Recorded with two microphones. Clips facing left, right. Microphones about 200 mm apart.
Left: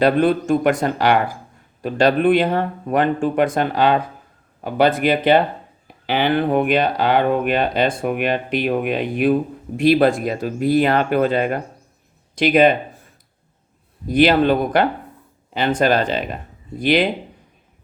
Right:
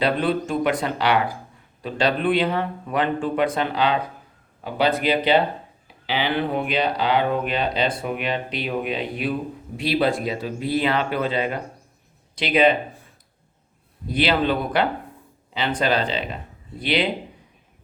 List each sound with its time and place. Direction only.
0.0 s speech: 50° left (ahead or behind)
14.1 s speech: 45° left (ahead or behind)